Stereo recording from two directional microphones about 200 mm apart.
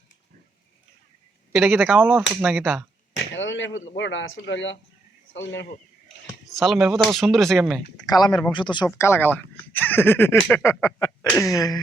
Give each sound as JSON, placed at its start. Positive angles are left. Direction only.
{"t": 1.5, "sound": "speech", "side_deg": 0}
{"t": 1.9, "sound": "speech", "side_deg": -10}
{"t": 3.3, "sound": "speech", "side_deg": 70}
{"t": 6.6, "sound": "speech", "side_deg": 0}
{"t": 8.0, "sound": "speech", "side_deg": 20}
{"t": 9.0, "sound": "a sound", "side_deg": 10}